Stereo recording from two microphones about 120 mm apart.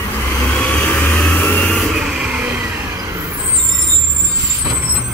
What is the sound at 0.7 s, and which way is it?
Vehicle, 10° left (ahead or behind).